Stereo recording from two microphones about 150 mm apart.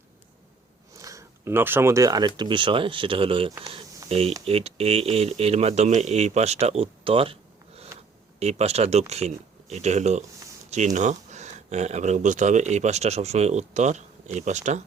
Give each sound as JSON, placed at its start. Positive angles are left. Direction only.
{"t": 0.9, "sound": "speech", "side_deg": -20}
{"t": 8.4, "sound": "speech", "side_deg": -45}